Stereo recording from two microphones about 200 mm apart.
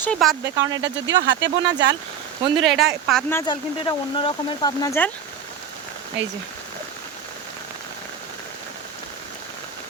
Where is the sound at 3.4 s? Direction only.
25° left (ahead or behind).